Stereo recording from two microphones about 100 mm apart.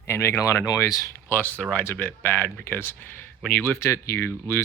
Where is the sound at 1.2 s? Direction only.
20° left (ahead or behind).